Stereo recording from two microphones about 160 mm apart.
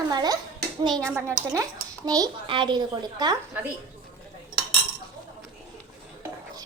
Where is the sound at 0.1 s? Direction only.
25° right (ahead or behind).